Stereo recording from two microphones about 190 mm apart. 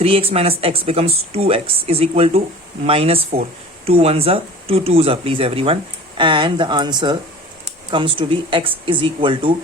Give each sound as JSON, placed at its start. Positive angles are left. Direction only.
{"t": 0.0, "sound": "speech", "side_deg": -30}